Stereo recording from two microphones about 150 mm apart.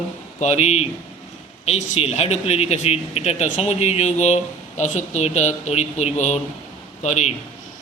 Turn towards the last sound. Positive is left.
turn(degrees=50)  # may be behind; listen again after turning